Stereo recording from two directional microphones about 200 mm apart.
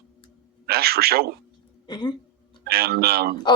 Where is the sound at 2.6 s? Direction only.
50° right (ahead or behind).